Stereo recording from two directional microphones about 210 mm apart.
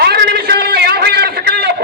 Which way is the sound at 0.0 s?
50° right (ahead or behind).